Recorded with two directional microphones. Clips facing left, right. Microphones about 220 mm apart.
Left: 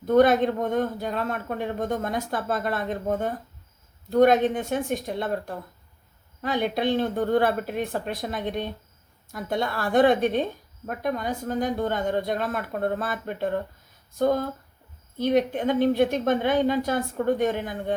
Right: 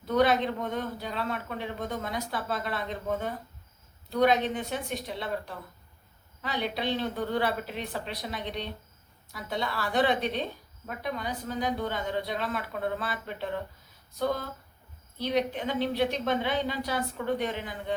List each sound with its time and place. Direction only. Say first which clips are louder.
0.0 s a woman's voice: left 6 dB; 50° left (ahead or behind)